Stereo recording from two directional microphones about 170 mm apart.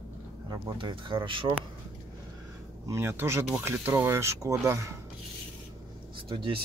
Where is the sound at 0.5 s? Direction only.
25° right (ahead or behind).